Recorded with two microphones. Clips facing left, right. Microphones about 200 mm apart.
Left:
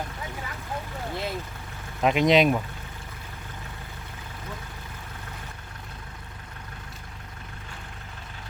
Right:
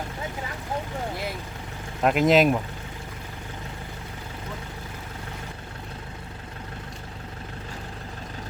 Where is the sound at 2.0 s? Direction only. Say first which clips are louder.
Right 1 dB; 5° right (ahead or behind).